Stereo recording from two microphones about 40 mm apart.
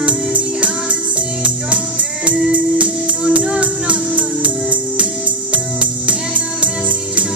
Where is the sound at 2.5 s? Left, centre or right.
Right.